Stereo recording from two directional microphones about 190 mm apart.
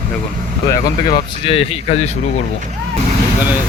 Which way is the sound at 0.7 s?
25° left (ahead or behind).